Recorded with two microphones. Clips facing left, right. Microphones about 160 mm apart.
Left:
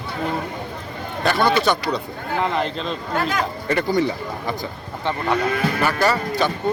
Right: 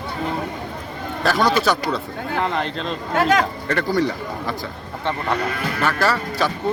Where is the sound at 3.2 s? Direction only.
75° right (ahead or behind).